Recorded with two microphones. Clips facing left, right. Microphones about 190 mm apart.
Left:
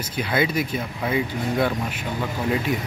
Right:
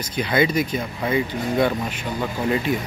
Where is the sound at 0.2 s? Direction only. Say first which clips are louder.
Right 3 dB; 5° left (ahead or behind).